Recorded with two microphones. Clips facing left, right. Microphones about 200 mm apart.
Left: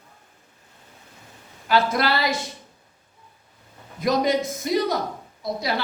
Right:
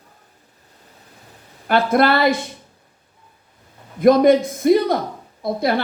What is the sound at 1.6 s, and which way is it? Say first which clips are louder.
Speech: right 5 dB; 55° right (ahead or behind).